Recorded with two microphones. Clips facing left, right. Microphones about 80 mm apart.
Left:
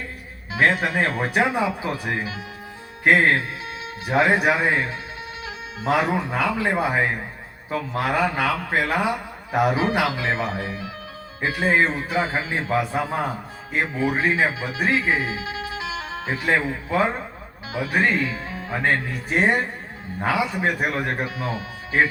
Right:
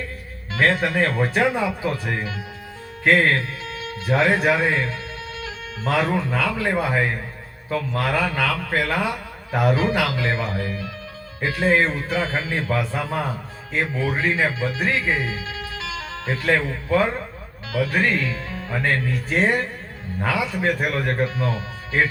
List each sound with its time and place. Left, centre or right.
0.5 s a man's voice: centre